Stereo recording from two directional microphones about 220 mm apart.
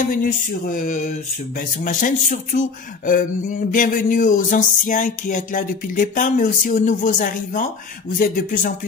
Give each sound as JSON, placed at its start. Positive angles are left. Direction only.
{"t": 0.0, "sound": "speech", "side_deg": 35}